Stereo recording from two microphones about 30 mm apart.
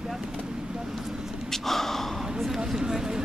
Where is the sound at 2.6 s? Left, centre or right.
Right.